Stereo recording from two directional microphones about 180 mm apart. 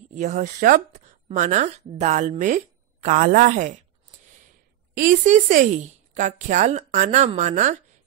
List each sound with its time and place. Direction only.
0.1 s a woman's voice: 40° right (ahead or behind)
4.9 s a woman's voice: 45° right (ahead or behind)